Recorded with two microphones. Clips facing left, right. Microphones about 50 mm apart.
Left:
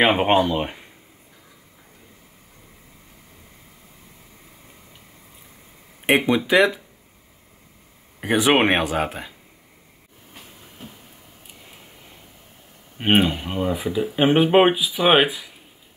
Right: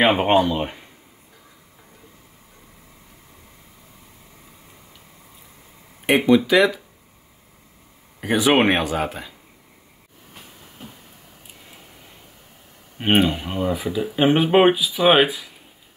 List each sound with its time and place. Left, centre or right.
0.0 s speech: centre
6.0 s speech: centre
8.2 s speech: centre
13.0 s speech: centre